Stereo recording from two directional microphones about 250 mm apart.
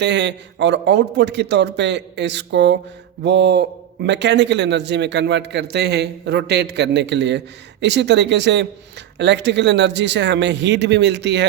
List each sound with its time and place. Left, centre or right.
0.0 s a man's voice: right